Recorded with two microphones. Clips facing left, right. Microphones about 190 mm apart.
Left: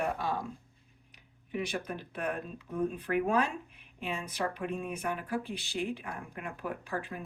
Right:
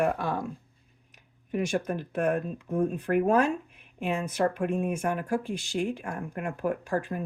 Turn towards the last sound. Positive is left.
turn(degrees=-45)  # may be behind; listen again after turning